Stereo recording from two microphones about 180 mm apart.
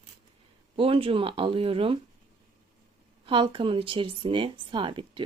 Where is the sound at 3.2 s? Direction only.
25° right (ahead or behind).